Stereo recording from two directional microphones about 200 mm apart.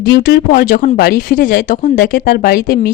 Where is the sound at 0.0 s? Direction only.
50° left (ahead or behind).